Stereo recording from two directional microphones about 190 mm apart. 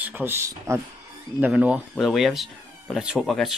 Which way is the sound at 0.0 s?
10° right (ahead or behind).